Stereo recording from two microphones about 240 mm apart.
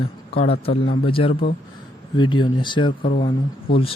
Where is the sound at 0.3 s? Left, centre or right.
Left.